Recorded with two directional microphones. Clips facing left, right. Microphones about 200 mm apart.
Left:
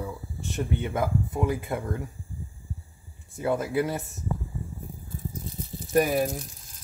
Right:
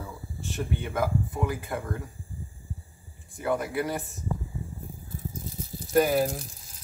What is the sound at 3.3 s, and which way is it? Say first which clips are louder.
Speech: left 2 dB; 20° left (ahead or behind).